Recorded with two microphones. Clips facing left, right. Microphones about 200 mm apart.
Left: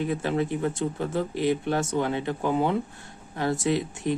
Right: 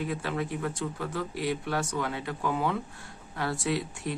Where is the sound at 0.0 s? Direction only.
25° left (ahead or behind).